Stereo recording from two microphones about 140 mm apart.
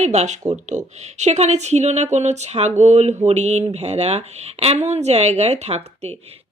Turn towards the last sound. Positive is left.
turn(degrees=-50)  # may be behind; listen again after turning